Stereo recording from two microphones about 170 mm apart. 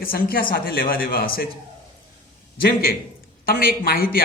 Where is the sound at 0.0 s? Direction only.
60° left (ahead or behind).